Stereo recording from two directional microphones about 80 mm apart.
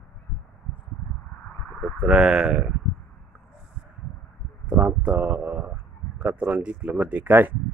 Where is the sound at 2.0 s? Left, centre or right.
Centre.